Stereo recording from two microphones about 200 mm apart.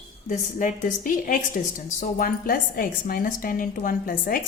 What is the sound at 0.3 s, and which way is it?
A woman's voice, 40° left (ahead or behind).